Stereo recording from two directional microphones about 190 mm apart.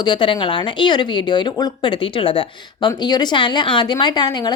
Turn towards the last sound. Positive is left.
turn(degrees=20)  # may be behind; listen again after turning